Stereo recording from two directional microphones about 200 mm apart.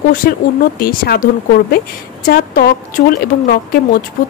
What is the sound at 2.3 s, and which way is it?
Speech, 45° left (ahead or behind).